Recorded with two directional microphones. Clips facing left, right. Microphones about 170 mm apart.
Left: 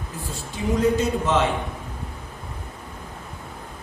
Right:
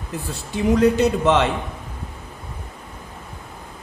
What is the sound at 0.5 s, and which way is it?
Speech, 70° right (ahead or behind).